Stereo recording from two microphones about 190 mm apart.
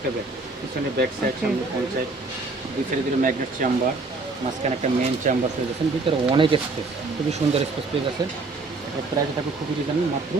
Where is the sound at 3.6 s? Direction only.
45° right (ahead or behind).